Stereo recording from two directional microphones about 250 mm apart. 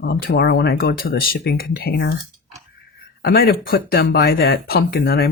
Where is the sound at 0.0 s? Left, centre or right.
Left.